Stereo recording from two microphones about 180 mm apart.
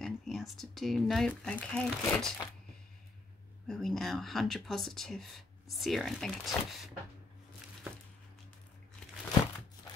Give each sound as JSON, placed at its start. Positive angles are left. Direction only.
{"t": 0.0, "sound": "speech", "side_deg": 0}
{"t": 3.6, "sound": "speech", "side_deg": 0}